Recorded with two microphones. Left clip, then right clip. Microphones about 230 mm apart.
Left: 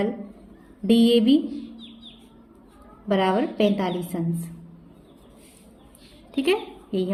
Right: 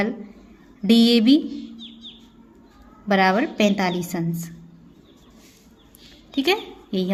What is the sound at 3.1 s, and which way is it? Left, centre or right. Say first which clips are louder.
A woman's voice: right 3 dB; right.